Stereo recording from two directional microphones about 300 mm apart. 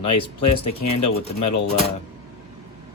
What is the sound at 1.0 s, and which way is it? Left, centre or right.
Speech, left.